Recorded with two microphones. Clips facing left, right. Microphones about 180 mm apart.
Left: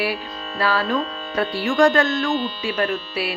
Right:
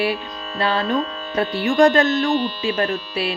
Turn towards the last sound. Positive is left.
turn(degrees=-25)  # may be behind; listen again after turning